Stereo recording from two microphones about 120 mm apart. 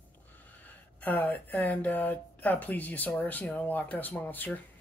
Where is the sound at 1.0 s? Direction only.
15° left (ahead or behind).